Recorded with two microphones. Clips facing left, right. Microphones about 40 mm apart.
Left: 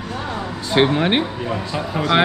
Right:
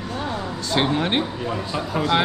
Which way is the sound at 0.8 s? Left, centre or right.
Centre.